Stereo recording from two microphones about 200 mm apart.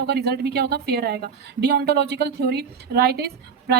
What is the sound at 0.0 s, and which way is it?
A woman's voice, 55° right (ahead or behind).